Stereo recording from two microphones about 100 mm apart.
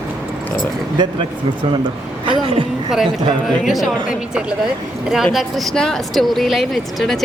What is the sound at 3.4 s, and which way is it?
Speech, centre (ahead or behind).